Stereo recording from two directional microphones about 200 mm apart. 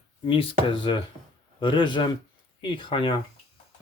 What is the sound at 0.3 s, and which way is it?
Speech, 25° left (ahead or behind).